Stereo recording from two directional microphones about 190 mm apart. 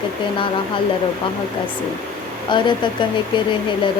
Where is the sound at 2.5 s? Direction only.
25° left (ahead or behind).